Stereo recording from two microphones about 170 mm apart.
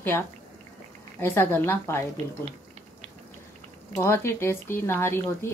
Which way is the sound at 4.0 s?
15° left (ahead or behind).